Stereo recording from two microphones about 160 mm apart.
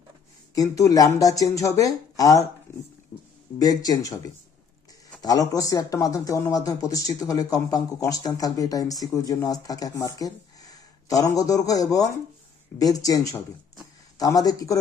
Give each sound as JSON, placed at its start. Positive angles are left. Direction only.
{"t": 0.5, "sound": "speech", "side_deg": 20}
{"t": 3.6, "sound": "speech", "side_deg": 25}
{"t": 5.2, "sound": "speech", "side_deg": 20}
{"t": 11.3, "sound": "speech", "side_deg": 20}